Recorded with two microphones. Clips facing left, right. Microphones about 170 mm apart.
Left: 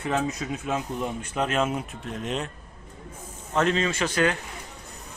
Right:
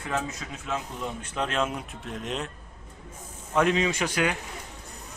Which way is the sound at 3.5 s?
15° right (ahead or behind).